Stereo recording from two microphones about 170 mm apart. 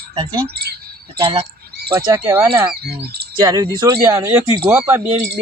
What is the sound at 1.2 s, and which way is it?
Speech, 30° right (ahead or behind).